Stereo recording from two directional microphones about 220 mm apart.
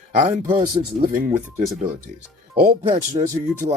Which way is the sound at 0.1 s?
30° right (ahead or behind).